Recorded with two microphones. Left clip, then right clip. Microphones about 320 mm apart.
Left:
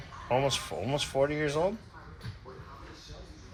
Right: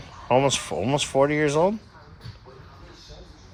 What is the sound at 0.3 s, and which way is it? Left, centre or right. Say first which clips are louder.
Speech: right 8 dB; centre.